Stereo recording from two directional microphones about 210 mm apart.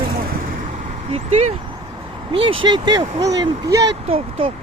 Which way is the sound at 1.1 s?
30° right (ahead or behind).